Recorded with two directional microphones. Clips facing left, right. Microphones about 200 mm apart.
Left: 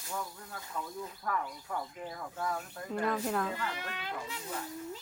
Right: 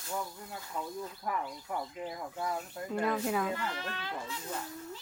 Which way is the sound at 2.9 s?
5° right (ahead or behind).